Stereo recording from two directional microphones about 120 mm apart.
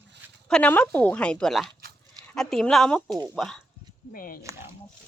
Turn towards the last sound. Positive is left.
turn(degrees=-25)  # may be behind; listen again after turning